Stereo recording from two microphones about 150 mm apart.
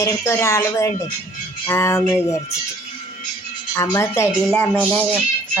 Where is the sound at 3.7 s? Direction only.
20° left (ahead or behind).